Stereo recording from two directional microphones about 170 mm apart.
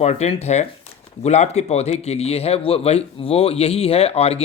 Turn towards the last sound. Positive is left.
turn(degrees=35)  # may be behind; listen again after turning